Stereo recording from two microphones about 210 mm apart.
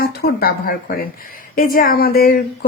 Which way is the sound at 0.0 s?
50° left (ahead or behind).